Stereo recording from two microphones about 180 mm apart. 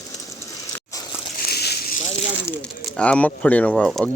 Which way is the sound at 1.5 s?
60° left (ahead or behind).